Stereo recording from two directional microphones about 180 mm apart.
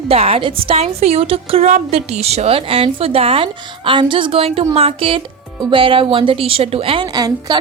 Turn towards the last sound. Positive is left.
turn(degrees=-20)  # may be behind; listen again after turning